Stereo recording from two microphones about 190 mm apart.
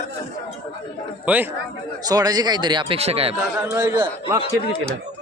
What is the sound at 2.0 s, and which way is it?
A man's voice, 20° right (ahead or behind).